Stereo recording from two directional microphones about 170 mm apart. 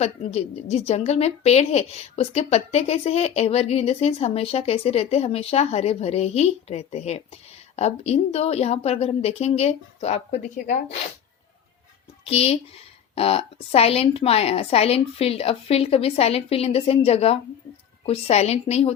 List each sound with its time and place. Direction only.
0.0 s a woman's voice: 40° left (ahead or behind)
12.2 s a woman's voice: 35° left (ahead or behind)